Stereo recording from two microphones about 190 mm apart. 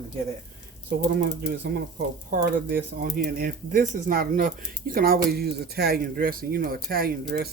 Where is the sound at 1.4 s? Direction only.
60° right (ahead or behind).